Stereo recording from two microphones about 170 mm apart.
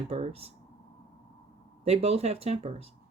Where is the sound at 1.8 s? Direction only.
35° right (ahead or behind).